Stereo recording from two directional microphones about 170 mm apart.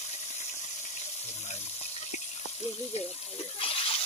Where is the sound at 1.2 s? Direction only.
40° left (ahead or behind).